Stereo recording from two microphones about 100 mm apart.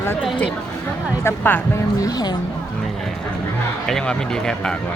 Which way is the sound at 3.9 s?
5° left (ahead or behind).